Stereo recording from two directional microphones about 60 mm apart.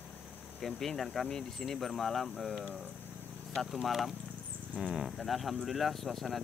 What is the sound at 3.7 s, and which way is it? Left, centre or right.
Speech, centre.